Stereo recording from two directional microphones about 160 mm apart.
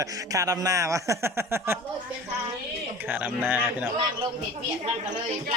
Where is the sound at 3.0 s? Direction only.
10° right (ahead or behind).